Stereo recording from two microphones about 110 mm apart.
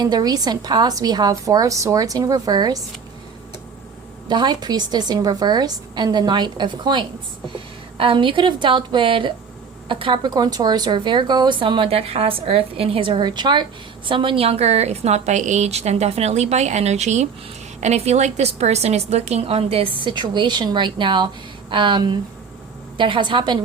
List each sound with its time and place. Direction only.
0.0 s a woman's voice: 35° right (ahead or behind)
4.3 s a woman's voice: 40° right (ahead or behind); by 19.9 s 65° right (ahead or behind)
20.0 s a woman's voice: 45° right (ahead or behind)